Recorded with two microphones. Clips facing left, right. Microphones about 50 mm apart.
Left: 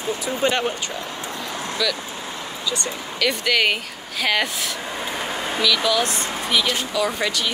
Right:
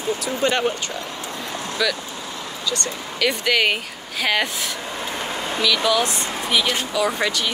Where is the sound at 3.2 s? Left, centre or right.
Centre.